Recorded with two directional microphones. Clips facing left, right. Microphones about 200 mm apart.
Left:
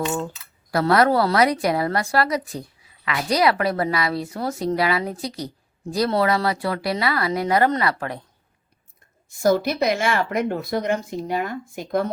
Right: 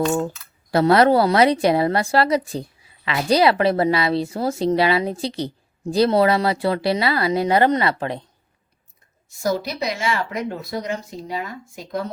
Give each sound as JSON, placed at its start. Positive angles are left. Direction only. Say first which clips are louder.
{"t": 0.7, "sound": "a woman's voice", "louder": "right 3 dB", "side_deg": -25}
{"t": 9.3, "sound": "speech", "louder": "left 4 dB", "side_deg": 55}